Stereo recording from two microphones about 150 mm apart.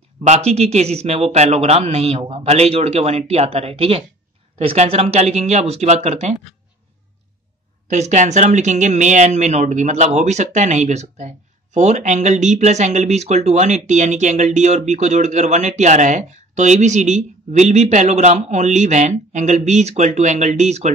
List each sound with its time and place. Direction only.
0.2 s speech: 45° right (ahead or behind)
7.9 s speech: 50° right (ahead or behind)